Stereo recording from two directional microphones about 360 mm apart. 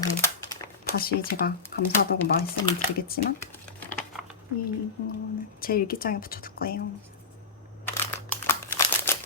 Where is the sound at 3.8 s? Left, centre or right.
Centre.